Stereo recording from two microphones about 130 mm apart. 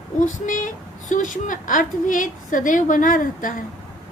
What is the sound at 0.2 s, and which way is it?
Speech, 85° left.